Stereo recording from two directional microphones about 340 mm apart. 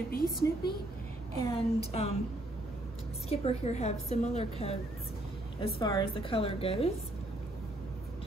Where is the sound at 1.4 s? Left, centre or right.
Centre.